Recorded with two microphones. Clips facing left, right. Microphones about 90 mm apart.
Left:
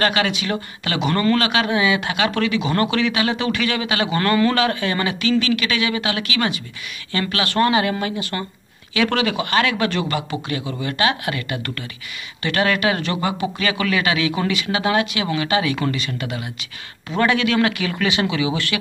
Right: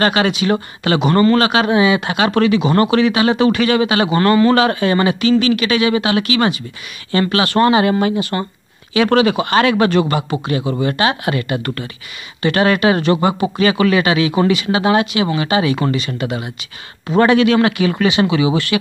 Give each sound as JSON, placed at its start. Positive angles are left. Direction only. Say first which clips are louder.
{"t": 0.0, "sound": "a man's voice", "louder": "right 5 dB", "side_deg": -30}
{"t": 1.1, "sound": "a man's voice", "louder": "right 5 dB", "side_deg": -25}
{"t": 4.1, "sound": "a man's voice", "louder": "right 5 dB", "side_deg": -25}
{"t": 17.6, "sound": "speech", "louder": "right 7 dB", "side_deg": -20}
{"t": 18.0, "sound": "speech", "louder": "right 5 dB", "side_deg": -10}